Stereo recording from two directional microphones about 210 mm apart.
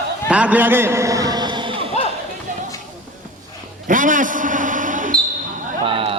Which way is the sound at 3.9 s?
40° right (ahead or behind).